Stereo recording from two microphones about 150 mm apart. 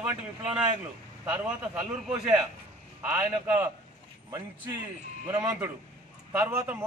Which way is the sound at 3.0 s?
15° right (ahead or behind).